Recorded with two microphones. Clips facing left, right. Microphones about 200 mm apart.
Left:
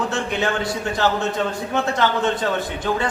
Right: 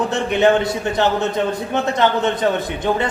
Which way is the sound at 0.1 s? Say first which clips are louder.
Right 7 dB; 20° right (ahead or behind).